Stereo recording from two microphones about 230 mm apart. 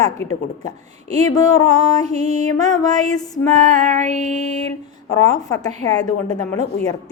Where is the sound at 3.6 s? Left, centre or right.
Right.